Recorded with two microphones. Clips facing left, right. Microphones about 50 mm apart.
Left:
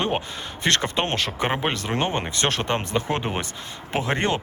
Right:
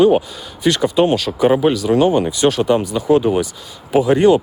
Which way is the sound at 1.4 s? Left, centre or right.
Left.